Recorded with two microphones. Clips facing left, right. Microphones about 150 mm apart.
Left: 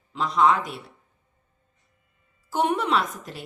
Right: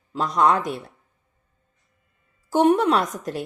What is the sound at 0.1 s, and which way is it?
Speech, 45° right (ahead or behind).